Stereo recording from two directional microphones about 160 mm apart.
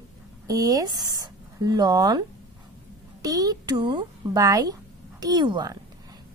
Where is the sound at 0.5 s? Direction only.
20° right (ahead or behind).